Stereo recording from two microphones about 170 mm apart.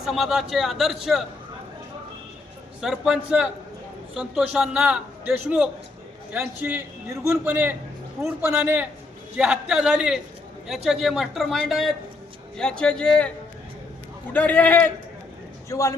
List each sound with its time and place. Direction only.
0.0 s a man's voice: centre (ahead or behind)
2.8 s a man's voice: 5° right (ahead or behind)
14.3 s a man's voice: 10° left (ahead or behind)